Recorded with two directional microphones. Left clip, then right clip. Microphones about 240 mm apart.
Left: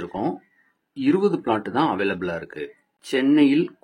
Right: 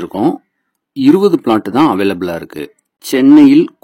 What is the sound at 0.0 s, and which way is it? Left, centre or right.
Speech, right.